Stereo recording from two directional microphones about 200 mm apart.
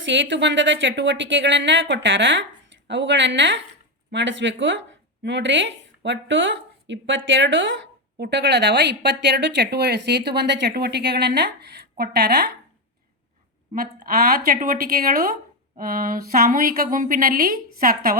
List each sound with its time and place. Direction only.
0.0 s a woman's voice: 65° right (ahead or behind)
8.2 s a woman's voice: 60° right (ahead or behind)
13.7 s a woman's voice: 40° right (ahead or behind)